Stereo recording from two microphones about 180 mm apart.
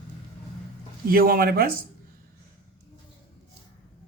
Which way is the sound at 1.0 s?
55° right (ahead or behind).